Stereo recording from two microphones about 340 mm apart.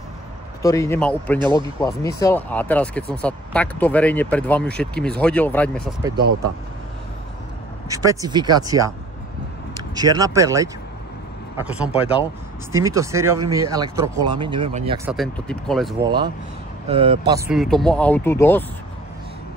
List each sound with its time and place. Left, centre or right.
0.6 s speech: centre
7.9 s speech: centre
15.0 s speech: centre
16.8 s speech: centre
17.3 s speech: centre